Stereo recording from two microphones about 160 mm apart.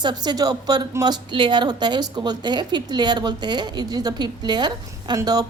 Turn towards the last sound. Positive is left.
turn(degrees=-25)  # may be behind; listen again after turning